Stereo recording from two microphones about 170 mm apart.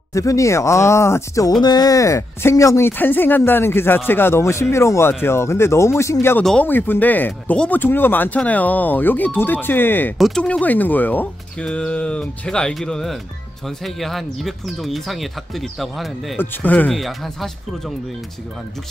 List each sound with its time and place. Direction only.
0.1 s speech: 20° left (ahead or behind)
10.1 s speech: centre (ahead or behind)